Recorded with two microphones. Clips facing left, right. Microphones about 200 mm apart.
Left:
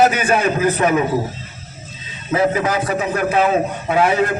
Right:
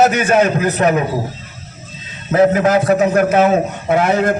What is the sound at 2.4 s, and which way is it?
Speech, 50° right (ahead or behind).